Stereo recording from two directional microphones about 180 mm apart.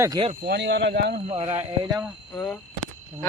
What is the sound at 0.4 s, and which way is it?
Speech, 70° right (ahead or behind).